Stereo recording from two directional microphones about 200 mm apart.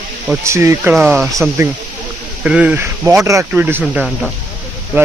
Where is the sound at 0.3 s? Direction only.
15° right (ahead or behind).